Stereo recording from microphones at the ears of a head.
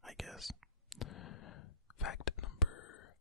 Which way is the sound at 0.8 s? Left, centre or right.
Left.